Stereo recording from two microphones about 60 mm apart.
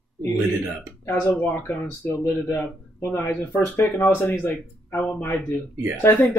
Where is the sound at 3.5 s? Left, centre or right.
Left.